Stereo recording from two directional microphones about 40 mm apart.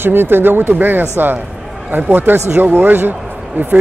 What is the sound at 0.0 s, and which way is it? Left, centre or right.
Speech, right.